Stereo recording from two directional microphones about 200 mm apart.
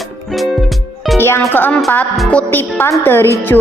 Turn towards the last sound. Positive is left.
turn(degrees=10)  # may be behind; listen again after turning